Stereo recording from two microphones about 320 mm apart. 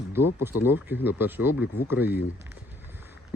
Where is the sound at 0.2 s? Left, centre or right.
Left.